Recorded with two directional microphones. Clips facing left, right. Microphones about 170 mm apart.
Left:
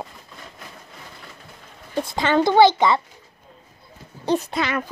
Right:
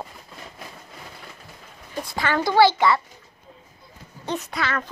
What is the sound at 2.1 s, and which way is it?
Speech, 20° left (ahead or behind).